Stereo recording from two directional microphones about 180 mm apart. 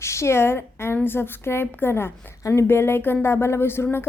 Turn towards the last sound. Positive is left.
turn(degrees=15)  # may be behind; listen again after turning